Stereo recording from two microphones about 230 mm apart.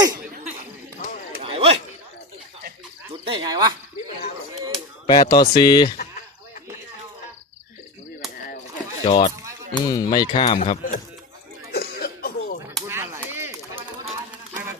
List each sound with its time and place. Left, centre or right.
1.4 s a sound: right
3.2 s speech: right
5.0 s speech: centre
9.0 s speech: left
9.7 s speech: centre; by 11.0 s left
11.7 s cough: left
12.9 s chop: centre
14.5 s a sound: centre